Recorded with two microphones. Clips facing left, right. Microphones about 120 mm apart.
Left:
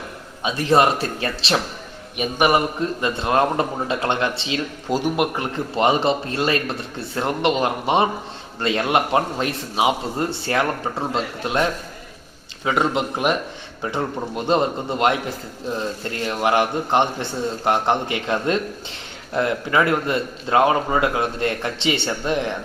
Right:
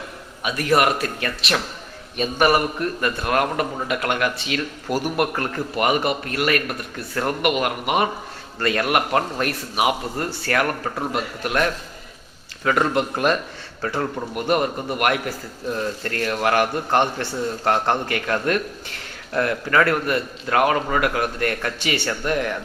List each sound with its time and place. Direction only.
0.4 s a man's voice: 25° left (ahead or behind)
2.1 s a man's voice: 20° left (ahead or behind)